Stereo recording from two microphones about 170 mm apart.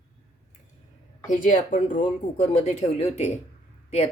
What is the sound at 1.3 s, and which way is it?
Speech, 50° left (ahead or behind).